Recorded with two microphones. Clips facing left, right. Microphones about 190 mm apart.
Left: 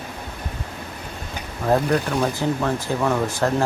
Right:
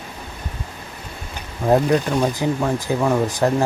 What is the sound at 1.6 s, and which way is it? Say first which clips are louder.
Speech: right 3 dB; 15° right (ahead or behind).